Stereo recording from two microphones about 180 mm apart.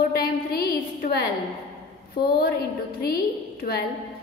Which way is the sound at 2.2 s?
55° left (ahead or behind).